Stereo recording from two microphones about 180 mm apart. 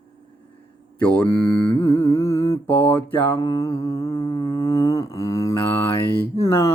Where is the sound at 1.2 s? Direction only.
25° left (ahead or behind).